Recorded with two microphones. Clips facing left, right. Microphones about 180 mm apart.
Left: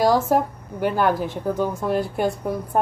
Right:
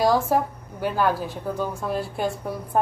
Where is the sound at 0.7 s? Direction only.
15° left (ahead or behind).